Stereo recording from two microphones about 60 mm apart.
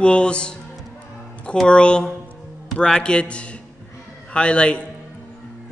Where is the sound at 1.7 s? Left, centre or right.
Centre.